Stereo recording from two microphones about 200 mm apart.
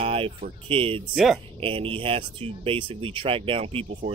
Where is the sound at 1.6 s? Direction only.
25° right (ahead or behind).